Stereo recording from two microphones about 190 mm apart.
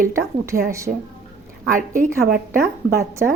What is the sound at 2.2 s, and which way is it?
Speech, 55° right (ahead or behind).